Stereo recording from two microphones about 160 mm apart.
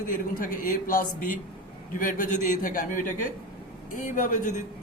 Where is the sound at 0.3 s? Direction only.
60° left (ahead or behind).